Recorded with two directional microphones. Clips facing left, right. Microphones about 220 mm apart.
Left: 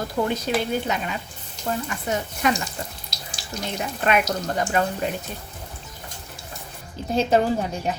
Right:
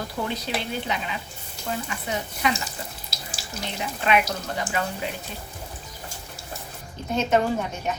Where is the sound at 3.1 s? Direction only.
5° right (ahead or behind).